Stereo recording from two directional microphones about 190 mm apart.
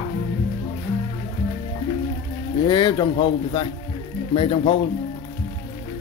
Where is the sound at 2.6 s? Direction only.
20° left (ahead or behind).